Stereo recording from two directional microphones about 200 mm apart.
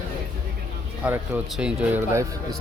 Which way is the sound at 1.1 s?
5° right (ahead or behind).